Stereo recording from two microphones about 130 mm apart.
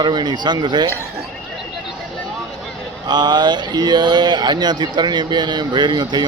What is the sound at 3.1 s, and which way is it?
Speech, 35° right (ahead or behind).